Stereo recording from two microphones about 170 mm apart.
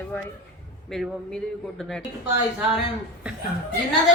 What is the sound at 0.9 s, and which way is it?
A woman's voice, centre (ahead or behind).